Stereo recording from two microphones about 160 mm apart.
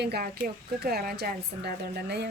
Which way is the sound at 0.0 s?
75° right (ahead or behind).